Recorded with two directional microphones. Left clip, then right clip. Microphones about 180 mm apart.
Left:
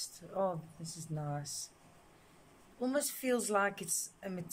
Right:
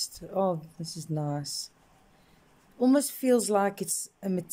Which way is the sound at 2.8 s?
30° right (ahead or behind).